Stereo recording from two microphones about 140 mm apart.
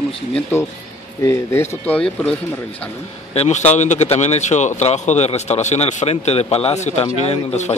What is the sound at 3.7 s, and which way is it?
A man's voice, 55° left (ahead or behind).